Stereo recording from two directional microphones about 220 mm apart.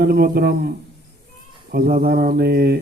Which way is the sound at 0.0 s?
45° right (ahead or behind).